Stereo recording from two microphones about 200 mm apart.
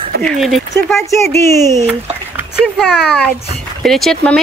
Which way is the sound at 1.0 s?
15° left (ahead or behind).